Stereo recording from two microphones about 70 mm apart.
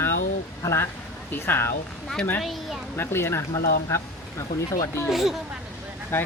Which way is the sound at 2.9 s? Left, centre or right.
Left.